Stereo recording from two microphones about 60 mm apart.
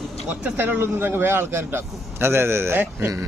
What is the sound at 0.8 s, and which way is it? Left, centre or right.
Speech, right.